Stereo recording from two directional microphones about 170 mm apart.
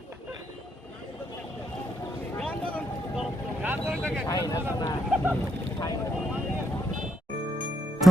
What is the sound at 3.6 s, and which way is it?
Vehicle, 10° right (ahead or behind).